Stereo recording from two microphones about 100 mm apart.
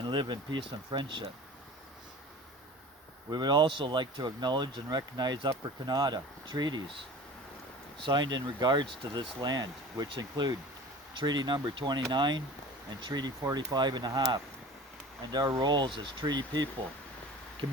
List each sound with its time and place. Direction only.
0.0 s speech: 50° right (ahead or behind)
3.2 s speech: 45° right (ahead or behind)
8.0 s speech: 45° right (ahead or behind)